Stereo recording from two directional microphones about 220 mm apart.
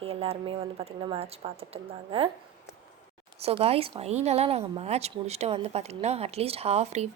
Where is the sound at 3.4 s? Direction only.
25° right (ahead or behind).